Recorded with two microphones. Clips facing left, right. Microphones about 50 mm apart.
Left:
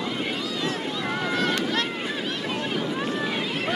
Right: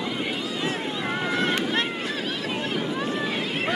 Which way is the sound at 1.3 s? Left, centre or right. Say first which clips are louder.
Even; right.